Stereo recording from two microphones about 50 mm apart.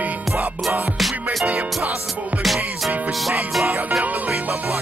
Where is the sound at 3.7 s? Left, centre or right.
Right.